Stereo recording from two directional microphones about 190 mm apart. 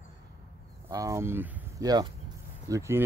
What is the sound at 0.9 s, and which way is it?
Speech, 15° right (ahead or behind).